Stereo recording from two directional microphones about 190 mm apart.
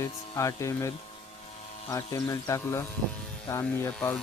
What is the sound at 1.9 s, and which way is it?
Speech, 15° left (ahead or behind).